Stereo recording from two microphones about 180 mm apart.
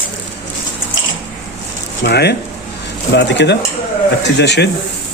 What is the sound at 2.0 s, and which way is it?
Speech, 65° left (ahead or behind).